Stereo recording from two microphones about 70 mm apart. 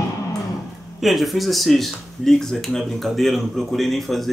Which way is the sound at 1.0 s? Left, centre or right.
Centre.